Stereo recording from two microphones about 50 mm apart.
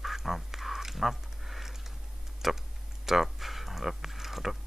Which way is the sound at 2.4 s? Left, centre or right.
Centre.